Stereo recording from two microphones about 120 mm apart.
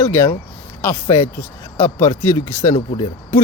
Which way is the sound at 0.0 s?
25° left (ahead or behind).